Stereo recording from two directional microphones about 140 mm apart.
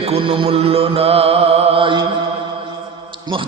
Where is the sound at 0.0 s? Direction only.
45° right (ahead or behind).